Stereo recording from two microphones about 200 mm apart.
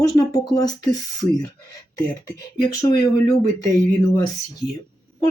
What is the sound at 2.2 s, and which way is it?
Speech, 15° left (ahead or behind).